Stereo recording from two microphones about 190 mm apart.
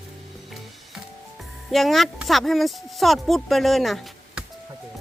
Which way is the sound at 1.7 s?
Centre (ahead or behind).